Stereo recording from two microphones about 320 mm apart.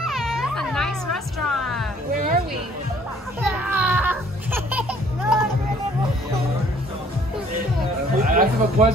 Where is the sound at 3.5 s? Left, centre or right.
Centre.